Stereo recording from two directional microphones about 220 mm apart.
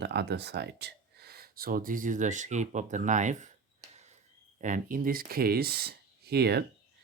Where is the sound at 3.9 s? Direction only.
30° right (ahead or behind).